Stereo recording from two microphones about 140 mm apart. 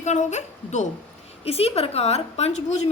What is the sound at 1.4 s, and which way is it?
A woman's voice, 45° left (ahead or behind).